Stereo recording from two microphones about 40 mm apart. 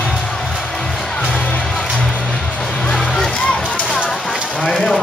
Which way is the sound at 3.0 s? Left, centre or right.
Centre.